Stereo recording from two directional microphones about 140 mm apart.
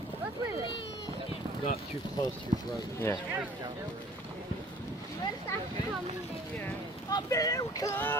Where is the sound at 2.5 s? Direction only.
60° right (ahead or behind).